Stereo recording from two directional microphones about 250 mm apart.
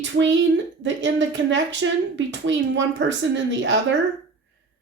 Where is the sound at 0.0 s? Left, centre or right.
Right.